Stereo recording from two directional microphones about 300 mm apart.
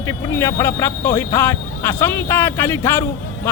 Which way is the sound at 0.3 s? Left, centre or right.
Centre.